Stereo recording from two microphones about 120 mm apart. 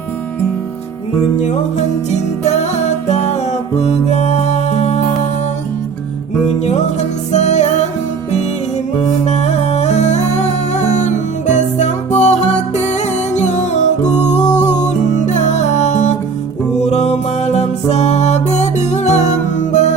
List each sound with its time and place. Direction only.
3.1 s music: 70° left (ahead or behind)
7.3 s music: 70° left (ahead or behind)
9.2 s music: 70° left (ahead or behind)